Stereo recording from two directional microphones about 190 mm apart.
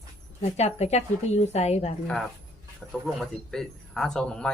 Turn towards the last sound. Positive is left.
turn(degrees=5)  # may be behind; listen again after turning